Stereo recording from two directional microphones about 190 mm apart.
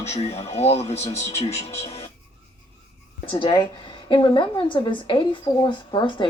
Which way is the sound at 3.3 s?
25° left (ahead or behind).